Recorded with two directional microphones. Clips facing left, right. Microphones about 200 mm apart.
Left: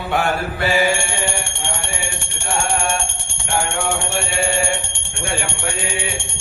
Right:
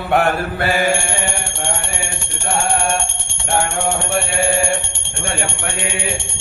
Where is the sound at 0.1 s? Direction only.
55° right (ahead or behind).